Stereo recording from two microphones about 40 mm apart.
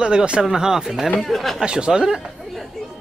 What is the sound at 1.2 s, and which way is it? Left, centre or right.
Speech, centre.